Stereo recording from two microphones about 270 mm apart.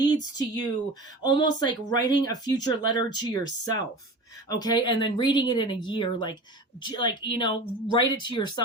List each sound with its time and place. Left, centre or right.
0.3 s speech: centre